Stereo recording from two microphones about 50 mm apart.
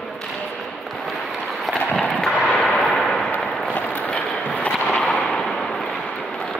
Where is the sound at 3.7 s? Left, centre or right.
Left.